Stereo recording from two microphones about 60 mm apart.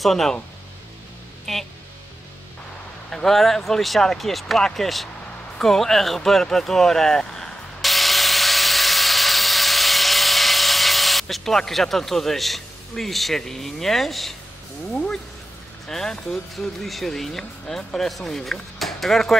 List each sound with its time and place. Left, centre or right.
0.0 s speech: centre
1.4 s music: centre
3.1 s speech: centre
5.6 s a sound: centre
14.9 s speech: centre
15.9 s speech: centre